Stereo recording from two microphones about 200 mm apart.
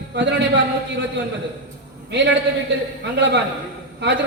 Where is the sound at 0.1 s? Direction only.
60° right (ahead or behind).